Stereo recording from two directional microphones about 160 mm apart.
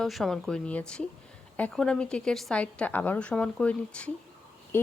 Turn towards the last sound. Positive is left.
turn(degrees=15)  # may be behind; listen again after turning